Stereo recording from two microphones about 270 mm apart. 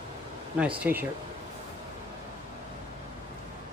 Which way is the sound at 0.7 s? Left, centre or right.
Centre.